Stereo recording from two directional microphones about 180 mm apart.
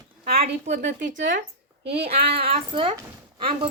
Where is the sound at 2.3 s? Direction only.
35° right (ahead or behind).